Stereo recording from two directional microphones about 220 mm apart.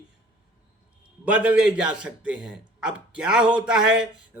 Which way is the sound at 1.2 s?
5° right (ahead or behind).